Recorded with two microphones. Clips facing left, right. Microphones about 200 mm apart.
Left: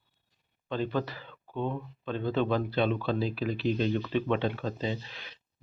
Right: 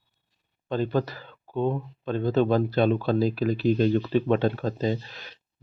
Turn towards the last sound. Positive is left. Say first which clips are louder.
# right 6 dB
turn(degrees=-45)  # may be behind; listen again after turning